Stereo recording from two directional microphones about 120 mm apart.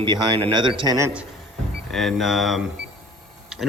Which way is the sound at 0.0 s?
45° right (ahead or behind).